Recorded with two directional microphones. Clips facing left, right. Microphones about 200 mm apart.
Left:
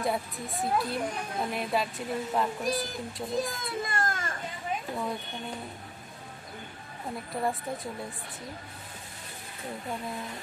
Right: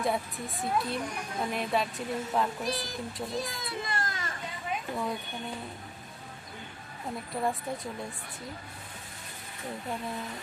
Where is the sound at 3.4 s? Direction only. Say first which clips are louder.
Left 2 dB; 50° left (ahead or behind).